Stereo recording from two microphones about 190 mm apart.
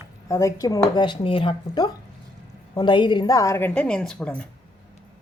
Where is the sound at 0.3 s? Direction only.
15° left (ahead or behind).